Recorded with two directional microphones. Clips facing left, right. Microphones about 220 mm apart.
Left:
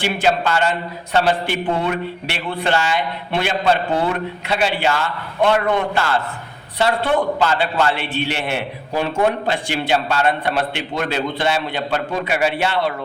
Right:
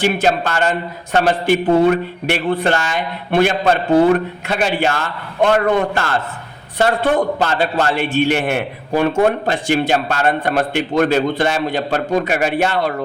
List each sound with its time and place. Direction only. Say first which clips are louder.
0.0 s a man's voice: right 3 dB; 45° right (ahead or behind)